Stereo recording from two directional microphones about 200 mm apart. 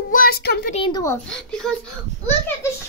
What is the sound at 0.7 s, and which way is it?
A child's voice, 20° left (ahead or behind).